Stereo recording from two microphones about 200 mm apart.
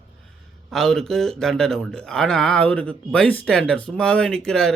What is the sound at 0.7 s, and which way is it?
Speech, centre (ahead or behind).